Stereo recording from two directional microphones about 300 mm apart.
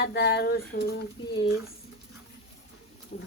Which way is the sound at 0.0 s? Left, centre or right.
Left.